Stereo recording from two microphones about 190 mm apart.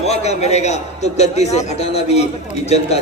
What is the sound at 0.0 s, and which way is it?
A man's voice, 35° left (ahead or behind).